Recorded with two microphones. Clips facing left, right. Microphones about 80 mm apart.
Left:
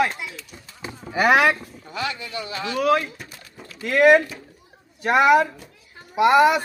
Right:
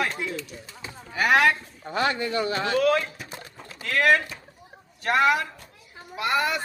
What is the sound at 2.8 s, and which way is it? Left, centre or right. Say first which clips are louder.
Speech: left 4 dB; centre.